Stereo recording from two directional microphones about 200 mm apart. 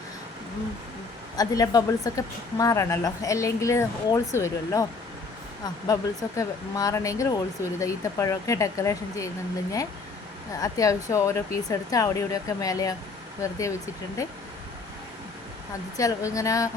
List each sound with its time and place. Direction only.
1.4 s a woman's voice: 20° left (ahead or behind)
10.6 s a woman's voice: 15° left (ahead or behind)
16.0 s a woman's voice: 15° left (ahead or behind)